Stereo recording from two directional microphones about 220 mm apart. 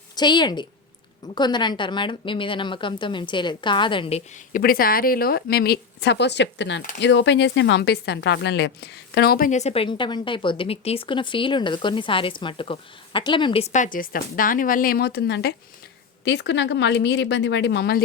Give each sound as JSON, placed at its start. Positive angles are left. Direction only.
{"t": 0.2, "sound": "a woman's voice", "side_deg": 20}